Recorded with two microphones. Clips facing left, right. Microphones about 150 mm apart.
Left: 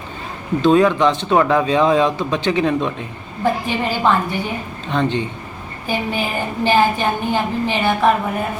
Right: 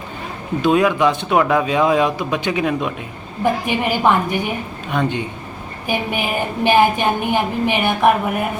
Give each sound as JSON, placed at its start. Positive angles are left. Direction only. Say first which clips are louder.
{"t": 0.6, "sound": "speech", "louder": "left 2 dB", "side_deg": -10}